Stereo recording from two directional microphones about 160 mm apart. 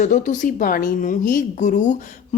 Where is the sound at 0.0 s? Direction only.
50° left (ahead or behind).